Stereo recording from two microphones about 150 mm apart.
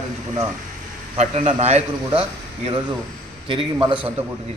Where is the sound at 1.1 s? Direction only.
45° right (ahead or behind).